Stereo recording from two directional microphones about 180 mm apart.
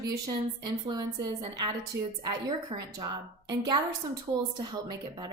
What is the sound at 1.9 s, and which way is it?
Speech, 80° right.